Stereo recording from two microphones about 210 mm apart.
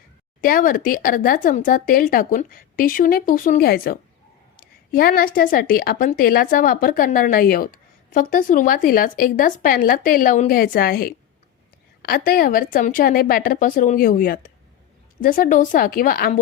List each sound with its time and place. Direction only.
0.4 s a woman's voice: 40° left (ahead or behind)